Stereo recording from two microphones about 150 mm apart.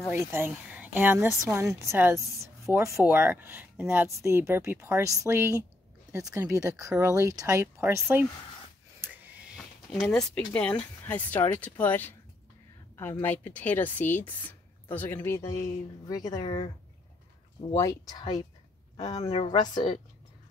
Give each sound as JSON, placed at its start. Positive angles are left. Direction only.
{"t": 0.1, "sound": "speech", "side_deg": -15}
{"t": 9.9, "sound": "a woman's voice", "side_deg": 5}
{"t": 17.7, "sound": "a woman's voice", "side_deg": 25}